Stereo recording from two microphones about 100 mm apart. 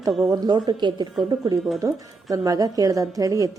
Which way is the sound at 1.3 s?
40° right (ahead or behind).